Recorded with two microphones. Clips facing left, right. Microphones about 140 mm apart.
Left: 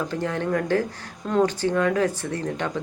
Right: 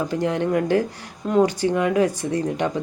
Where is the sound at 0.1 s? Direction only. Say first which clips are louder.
Right 4 dB; 15° right (ahead or behind).